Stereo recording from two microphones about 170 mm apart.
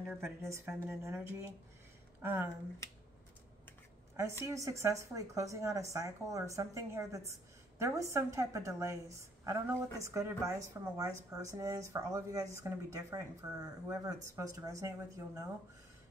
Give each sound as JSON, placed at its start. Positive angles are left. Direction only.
{"t": 0.1, "sound": "a woman's voice", "side_deg": -15}
{"t": 4.2, "sound": "a woman's voice", "side_deg": -15}